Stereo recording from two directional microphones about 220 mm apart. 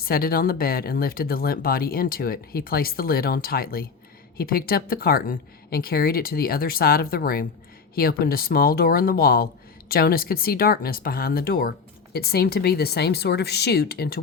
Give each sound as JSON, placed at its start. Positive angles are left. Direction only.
{"t": 0.0, "sound": "speech", "side_deg": 45}